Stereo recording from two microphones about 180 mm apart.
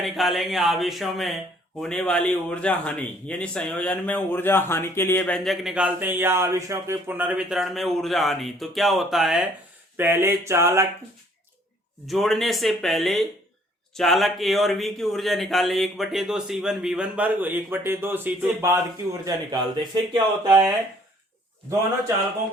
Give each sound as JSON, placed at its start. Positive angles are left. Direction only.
{"t": 0.0, "sound": "a man's voice", "side_deg": 0}
{"t": 10.0, "sound": "a sound", "side_deg": -10}
{"t": 12.0, "sound": "a man's voice", "side_deg": 0}